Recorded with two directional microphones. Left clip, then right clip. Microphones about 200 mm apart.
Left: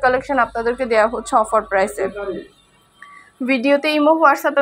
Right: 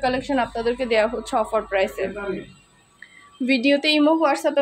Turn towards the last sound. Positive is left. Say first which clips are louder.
# left 5 dB
turn(degrees=0)  # may be behind; listen again after turning